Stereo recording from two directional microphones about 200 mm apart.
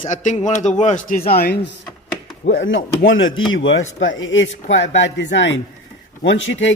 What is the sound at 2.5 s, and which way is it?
Speech, 70° left (ahead or behind).